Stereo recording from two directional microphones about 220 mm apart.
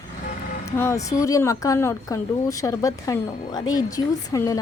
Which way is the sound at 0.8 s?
15° left (ahead or behind).